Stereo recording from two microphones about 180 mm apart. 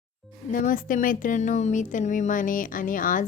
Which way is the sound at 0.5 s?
50° left (ahead or behind).